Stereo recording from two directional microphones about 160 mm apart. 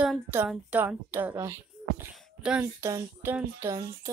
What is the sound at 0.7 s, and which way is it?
Speech, 10° right (ahead or behind).